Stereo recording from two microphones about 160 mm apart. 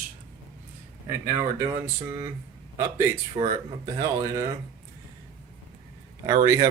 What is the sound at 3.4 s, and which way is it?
Speech, 35° right (ahead or behind).